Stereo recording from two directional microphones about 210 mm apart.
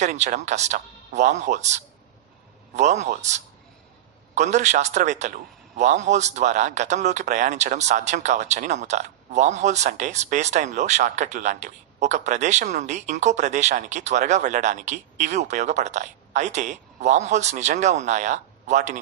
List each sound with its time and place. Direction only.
0.0 s a man's voice: 35° right (ahead or behind)